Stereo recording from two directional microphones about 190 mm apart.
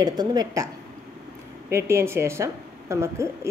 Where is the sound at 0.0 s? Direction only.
20° right (ahead or behind).